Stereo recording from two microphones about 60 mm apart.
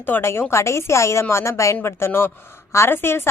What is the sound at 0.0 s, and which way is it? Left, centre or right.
Speech, left.